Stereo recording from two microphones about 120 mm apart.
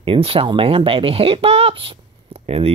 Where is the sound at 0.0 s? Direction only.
50° right (ahead or behind).